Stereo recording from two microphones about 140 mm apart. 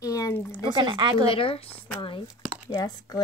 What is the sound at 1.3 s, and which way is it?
Speech, 40° left (ahead or behind).